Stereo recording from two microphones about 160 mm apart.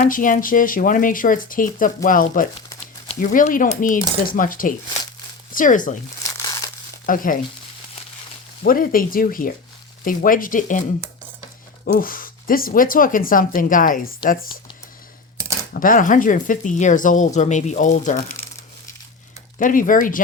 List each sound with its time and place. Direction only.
0.0 s speech: 60° left (ahead or behind)
7.0 s speech: 60° left (ahead or behind)
8.6 s speech: 60° left (ahead or behind)
11.9 s speech: 60° left (ahead or behind)
15.7 s speech: 60° left (ahead or behind)
19.5 s speech: 55° left (ahead or behind)